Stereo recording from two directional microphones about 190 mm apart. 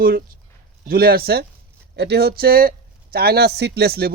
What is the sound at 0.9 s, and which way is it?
A man's voice, 50° right (ahead or behind).